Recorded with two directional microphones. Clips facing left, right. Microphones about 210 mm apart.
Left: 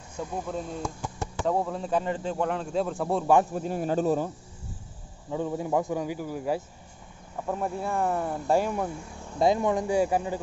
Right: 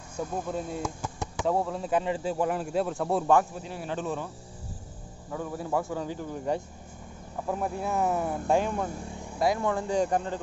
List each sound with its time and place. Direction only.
0.5 s speech: 5° right (ahead or behind)
3.5 s speech: 45° left (ahead or behind)
5.3 s speech: 20° left (ahead or behind)
9.4 s speech: 20° left (ahead or behind)